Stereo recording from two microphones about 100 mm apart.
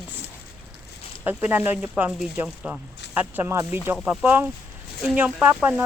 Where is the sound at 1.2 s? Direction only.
20° right (ahead or behind).